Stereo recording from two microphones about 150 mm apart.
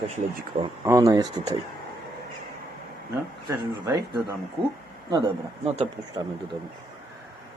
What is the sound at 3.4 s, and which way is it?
Speech, 25° right (ahead or behind).